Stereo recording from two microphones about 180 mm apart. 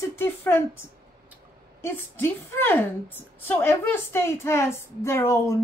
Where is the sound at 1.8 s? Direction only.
10° left (ahead or behind).